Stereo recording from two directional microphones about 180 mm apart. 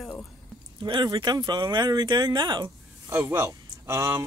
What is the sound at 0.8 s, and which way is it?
Speech, 25° right (ahead or behind).